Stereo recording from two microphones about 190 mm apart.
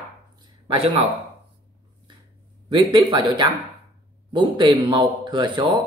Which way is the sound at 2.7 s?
20° right (ahead or behind).